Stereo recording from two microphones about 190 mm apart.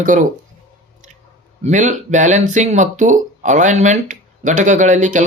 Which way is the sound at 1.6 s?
40° right (ahead or behind).